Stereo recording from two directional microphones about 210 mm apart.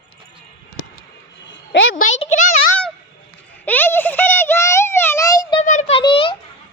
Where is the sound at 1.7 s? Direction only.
70° left (ahead or behind).